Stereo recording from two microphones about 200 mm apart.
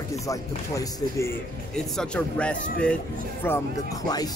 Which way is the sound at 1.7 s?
5° left (ahead or behind).